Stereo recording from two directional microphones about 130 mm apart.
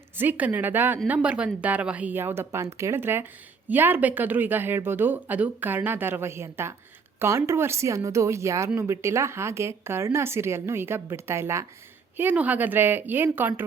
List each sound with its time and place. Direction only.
0.2 s a woman's voice: 15° right (ahead or behind)